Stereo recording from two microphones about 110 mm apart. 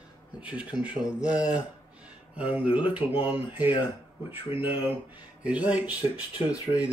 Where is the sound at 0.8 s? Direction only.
10° right (ahead or behind).